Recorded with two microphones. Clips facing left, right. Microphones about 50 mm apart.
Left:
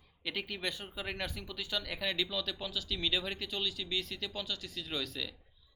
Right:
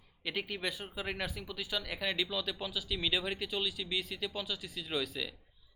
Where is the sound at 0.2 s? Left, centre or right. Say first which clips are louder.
Right 1 dB; centre.